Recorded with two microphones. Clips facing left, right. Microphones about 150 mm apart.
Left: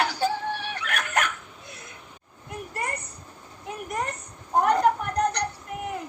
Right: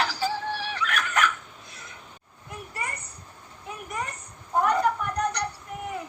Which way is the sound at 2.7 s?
50° left (ahead or behind).